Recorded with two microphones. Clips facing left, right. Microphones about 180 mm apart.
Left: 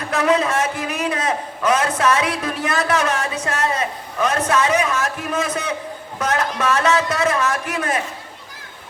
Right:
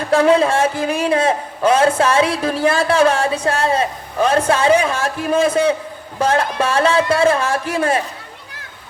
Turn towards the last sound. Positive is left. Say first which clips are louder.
# right 5 dB
turn(degrees=-30)  # may be behind; listen again after turning